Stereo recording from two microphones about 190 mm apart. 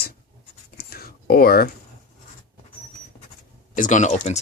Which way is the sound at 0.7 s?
50° left (ahead or behind).